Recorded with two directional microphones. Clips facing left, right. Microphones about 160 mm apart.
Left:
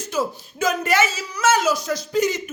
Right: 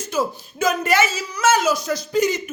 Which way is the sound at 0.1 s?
10° right (ahead or behind).